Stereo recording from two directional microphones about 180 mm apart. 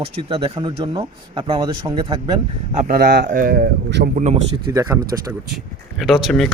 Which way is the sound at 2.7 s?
60° right (ahead or behind).